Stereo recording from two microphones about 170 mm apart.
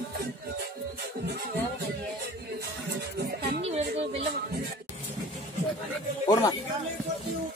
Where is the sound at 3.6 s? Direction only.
35° right (ahead or behind).